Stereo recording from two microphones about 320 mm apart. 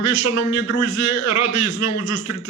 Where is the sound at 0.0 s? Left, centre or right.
Left.